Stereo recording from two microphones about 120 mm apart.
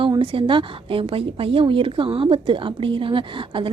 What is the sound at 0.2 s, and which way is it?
A woman's voice, 50° right (ahead or behind).